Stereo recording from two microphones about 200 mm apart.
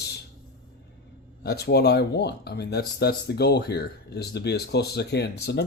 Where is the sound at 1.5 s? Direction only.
55° left (ahead or behind).